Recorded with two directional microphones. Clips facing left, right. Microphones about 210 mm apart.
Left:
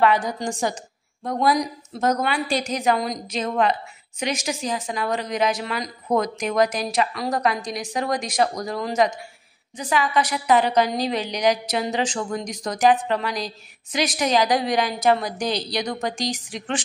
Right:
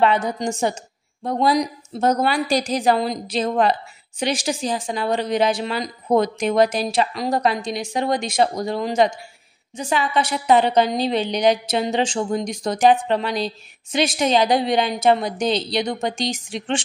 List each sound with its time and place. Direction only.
0.0 s a woman's voice: 25° right (ahead or behind)